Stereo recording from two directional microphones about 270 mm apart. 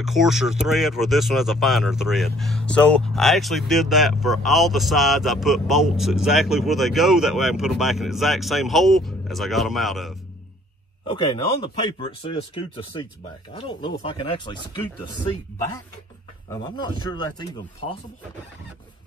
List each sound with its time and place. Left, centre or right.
0.0 s speech: centre
11.6 s speech: centre
16.4 s speech: centre